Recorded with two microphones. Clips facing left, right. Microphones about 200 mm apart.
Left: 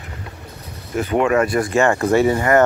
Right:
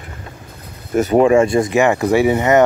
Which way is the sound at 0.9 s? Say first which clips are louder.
Right 5 dB; 40° right (ahead or behind).